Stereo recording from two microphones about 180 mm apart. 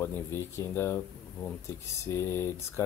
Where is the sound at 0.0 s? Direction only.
15° left (ahead or behind).